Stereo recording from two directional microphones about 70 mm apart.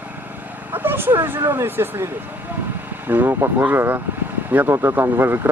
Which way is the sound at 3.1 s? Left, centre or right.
Right.